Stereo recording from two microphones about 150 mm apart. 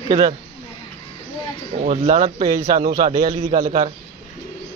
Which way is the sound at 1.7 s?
55° right (ahead or behind).